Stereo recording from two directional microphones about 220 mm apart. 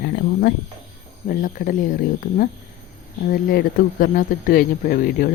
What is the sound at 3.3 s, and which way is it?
Speech, 40° left (ahead or behind).